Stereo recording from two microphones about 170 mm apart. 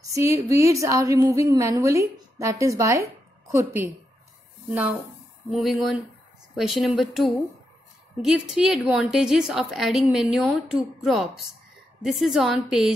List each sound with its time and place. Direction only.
0.1 s a woman's voice: 20° right (ahead or behind)
5.5 s a woman's voice: centre (ahead or behind)